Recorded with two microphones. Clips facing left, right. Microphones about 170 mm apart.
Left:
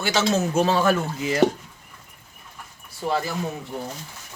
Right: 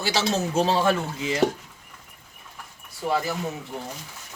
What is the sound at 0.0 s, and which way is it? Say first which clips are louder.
Speech: left 3 dB; 30° right (ahead or behind).